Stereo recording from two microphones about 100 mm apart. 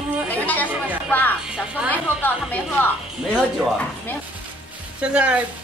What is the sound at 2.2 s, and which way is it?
Speech, 20° left (ahead or behind).